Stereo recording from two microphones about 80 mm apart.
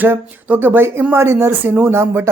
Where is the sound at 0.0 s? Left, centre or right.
Right.